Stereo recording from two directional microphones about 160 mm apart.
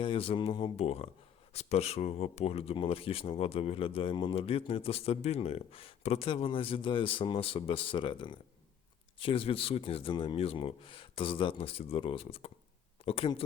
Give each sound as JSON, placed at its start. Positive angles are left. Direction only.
{"t": 0.0, "sound": "speech", "side_deg": 35}